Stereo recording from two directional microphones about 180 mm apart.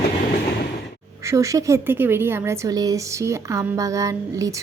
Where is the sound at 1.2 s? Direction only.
15° right (ahead or behind).